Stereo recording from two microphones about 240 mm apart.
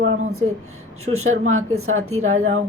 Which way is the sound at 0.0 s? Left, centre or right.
Right.